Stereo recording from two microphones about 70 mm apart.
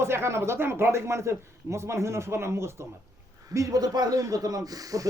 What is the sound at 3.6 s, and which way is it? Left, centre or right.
Speech, right.